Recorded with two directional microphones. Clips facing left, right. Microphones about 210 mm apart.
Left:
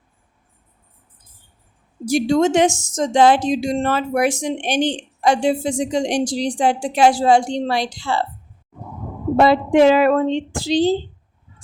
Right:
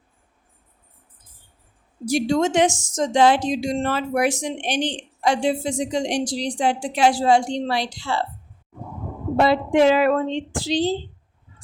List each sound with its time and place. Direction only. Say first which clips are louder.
2.0 s a woman's voice: left 4 dB; 45° left (ahead or behind)
2.6 s a woman's voice: left 3 dB; 25° left (ahead or behind)
3.0 s a woman's voice: left 3 dB; 45° left (ahead or behind)
9.4 s a woman's voice: left 4 dB; 45° left (ahead or behind)